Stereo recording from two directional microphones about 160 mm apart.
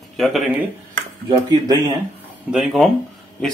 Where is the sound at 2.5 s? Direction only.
Centre (ahead or behind).